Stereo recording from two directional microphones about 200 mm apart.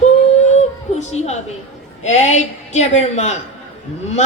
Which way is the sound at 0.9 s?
35° left (ahead or behind).